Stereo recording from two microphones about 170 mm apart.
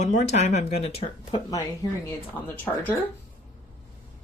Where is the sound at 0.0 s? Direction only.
45° left (ahead or behind).